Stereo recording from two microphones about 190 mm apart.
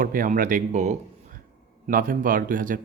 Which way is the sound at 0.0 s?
45° right (ahead or behind).